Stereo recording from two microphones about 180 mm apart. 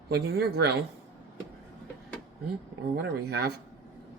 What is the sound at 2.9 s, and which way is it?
Speech, 60° right (ahead or behind).